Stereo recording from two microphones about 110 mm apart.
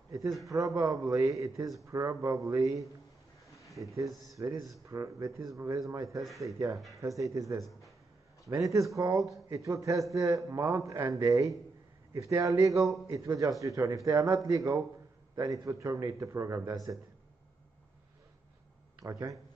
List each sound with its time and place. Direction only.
0.5 s speech: 30° right (ahead or behind)
18.9 s speech: 30° right (ahead or behind)